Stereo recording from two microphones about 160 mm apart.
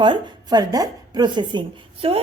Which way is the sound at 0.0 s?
30° right (ahead or behind).